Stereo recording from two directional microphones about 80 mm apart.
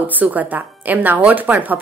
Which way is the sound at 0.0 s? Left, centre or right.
Right.